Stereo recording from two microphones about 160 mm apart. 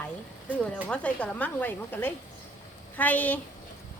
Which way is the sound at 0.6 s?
5° left (ahead or behind).